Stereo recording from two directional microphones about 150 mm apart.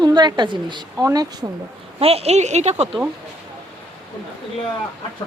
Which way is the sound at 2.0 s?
40° right (ahead or behind).